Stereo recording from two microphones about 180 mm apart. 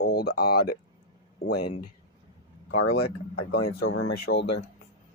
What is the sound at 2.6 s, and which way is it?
Speech, 60° left (ahead or behind).